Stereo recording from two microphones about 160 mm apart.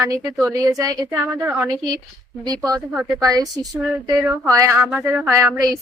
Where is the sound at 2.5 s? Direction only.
25° right (ahead or behind).